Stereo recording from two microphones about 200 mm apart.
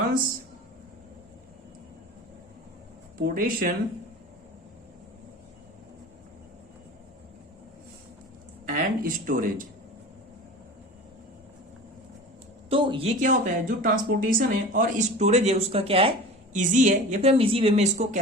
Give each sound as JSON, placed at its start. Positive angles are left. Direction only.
{"t": 3.2, "sound": "speech", "side_deg": -45}
{"t": 8.7, "sound": "speech", "side_deg": -45}
{"t": 12.7, "sound": "speech", "side_deg": -25}